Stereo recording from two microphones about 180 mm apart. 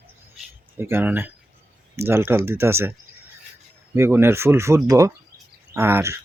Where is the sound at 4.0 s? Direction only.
15° right (ahead or behind).